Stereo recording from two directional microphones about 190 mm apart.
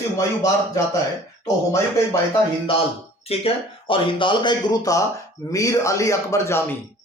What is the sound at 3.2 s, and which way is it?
Speech, 30° left (ahead or behind).